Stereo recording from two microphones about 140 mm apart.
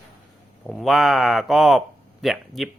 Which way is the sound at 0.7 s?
Centre (ahead or behind).